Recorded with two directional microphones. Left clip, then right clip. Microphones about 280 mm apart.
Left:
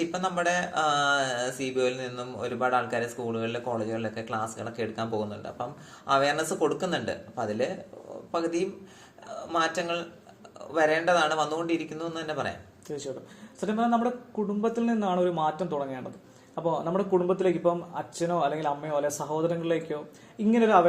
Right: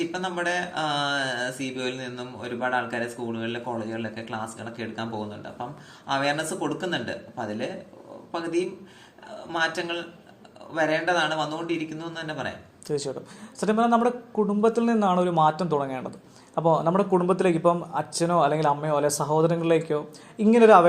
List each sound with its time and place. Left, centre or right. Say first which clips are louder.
0.2 s mantra: left 2 dB; left
6.1 s mantra: left 1 dB; left
12.9 s speech: right 6 dB; right